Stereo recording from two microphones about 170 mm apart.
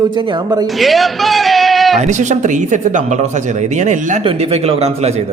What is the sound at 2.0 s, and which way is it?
Speech, 45° right (ahead or behind).